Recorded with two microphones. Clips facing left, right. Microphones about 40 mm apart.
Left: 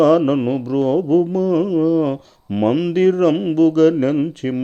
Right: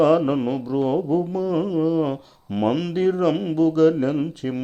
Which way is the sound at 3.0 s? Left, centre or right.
Left.